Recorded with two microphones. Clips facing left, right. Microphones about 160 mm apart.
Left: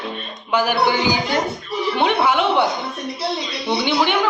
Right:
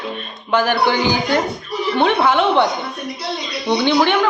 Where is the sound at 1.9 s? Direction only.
10° left (ahead or behind).